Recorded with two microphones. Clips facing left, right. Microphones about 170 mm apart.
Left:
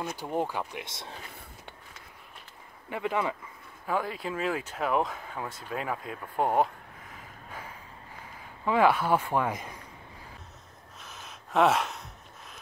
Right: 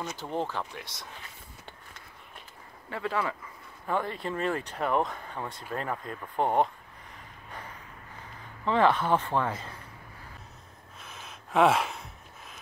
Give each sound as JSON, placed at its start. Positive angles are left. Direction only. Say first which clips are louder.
{"t": 0.0, "sound": "speech", "louder": "left 2 dB", "side_deg": 10}
{"t": 2.9, "sound": "speech", "louder": "left 1 dB", "side_deg": 15}
{"t": 3.8, "sound": "speech", "louder": "even", "side_deg": 5}
{"t": 7.2, "sound": "a sound", "louder": "even", "side_deg": 5}
{"t": 8.6, "sound": "speech", "louder": "even", "side_deg": 10}
{"t": 11.0, "sound": "a sound", "louder": "right 1 dB", "side_deg": 0}